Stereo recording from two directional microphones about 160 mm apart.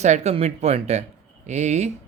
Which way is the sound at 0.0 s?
45° right (ahead or behind).